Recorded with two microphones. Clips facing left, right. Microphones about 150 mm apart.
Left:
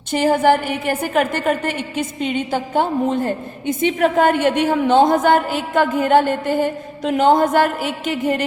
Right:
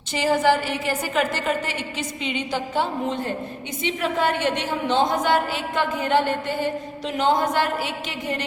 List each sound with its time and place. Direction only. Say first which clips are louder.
0.1 s a woman's voice: left 5 dB; 50° left (ahead or behind)